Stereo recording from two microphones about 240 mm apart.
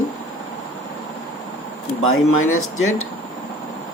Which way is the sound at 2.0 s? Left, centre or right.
Left.